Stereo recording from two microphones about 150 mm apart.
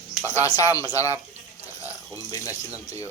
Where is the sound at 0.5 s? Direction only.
25° left (ahead or behind).